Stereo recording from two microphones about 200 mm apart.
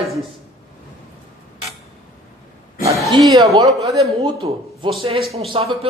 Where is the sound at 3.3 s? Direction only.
20° right (ahead or behind).